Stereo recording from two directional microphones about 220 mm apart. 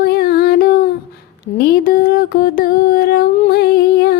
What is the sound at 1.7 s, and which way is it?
Music, 45° left (ahead or behind).